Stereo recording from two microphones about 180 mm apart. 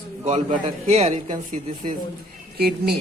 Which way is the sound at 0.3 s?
40° right (ahead or behind).